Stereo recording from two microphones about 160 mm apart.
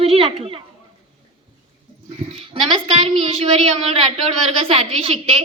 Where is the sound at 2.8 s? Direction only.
40° right (ahead or behind).